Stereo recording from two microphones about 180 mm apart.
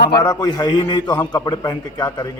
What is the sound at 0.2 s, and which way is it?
A man's voice, 20° left (ahead or behind).